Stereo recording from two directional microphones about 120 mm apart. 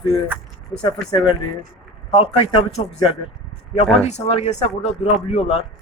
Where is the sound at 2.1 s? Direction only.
50° left (ahead or behind).